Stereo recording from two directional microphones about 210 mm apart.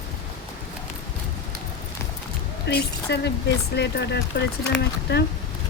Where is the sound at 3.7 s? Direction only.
55° left (ahead or behind).